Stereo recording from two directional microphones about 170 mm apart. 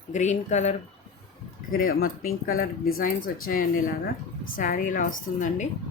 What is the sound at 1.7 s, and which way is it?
Speech, 60° left (ahead or behind).